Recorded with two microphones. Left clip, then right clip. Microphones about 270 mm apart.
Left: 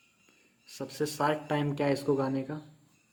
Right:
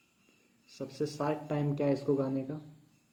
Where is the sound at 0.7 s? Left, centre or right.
Left.